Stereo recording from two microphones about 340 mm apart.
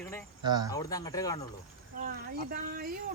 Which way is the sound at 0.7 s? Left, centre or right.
Centre.